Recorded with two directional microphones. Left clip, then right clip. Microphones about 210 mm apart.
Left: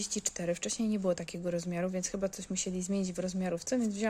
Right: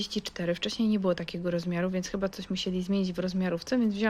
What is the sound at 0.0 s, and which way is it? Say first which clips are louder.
Speech: right 3 dB; 5° left (ahead or behind).